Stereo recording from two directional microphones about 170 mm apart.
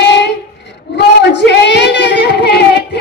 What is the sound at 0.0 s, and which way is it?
Child singing, 90° left.